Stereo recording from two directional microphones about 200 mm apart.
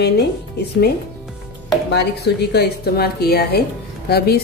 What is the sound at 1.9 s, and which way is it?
A woman's voice, 55° left (ahead or behind).